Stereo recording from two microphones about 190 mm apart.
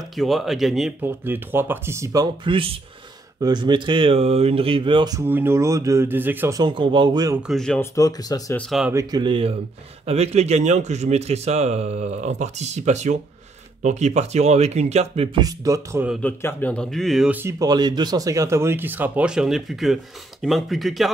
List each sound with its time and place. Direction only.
0.1 s speech: centre (ahead or behind)
6.6 s speech: 25° right (ahead or behind)
7.4 s speech: centre (ahead or behind)
7.8 s speech: 15° left (ahead or behind)
8.5 s speech: centre (ahead or behind)
8.9 s speech: 25° right (ahead or behind)
15.4 s speech: 15° right (ahead or behind)
16.2 s speech: 10° left (ahead or behind)